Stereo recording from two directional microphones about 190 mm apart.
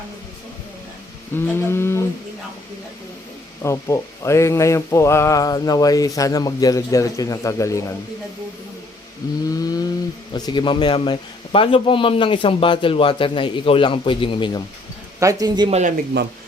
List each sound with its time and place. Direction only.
1.5 s a sound: 10° left (ahead or behind)
3.6 s a sound: 15° left (ahead or behind)
9.2 s a man's voice: 20° left (ahead or behind)
9.6 s chainsaw: 20° left (ahead or behind)
10.3 s a man's voice: 25° left (ahead or behind)
15.2 s a man's voice: 20° right (ahead or behind)